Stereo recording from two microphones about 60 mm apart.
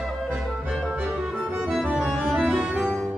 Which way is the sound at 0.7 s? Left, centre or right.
Centre.